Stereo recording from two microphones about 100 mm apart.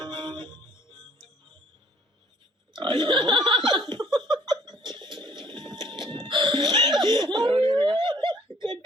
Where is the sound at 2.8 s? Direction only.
50° right (ahead or behind).